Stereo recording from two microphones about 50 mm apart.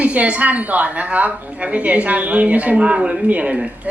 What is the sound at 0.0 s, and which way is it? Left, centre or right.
Speech, right.